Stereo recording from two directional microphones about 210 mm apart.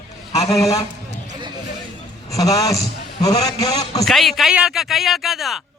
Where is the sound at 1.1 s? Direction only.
20° right (ahead or behind).